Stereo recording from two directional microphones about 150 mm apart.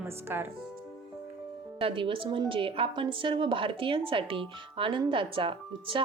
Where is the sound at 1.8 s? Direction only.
35° right (ahead or behind).